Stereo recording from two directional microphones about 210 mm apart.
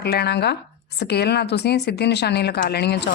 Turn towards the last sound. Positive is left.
turn(degrees=50)  # may be behind; listen again after turning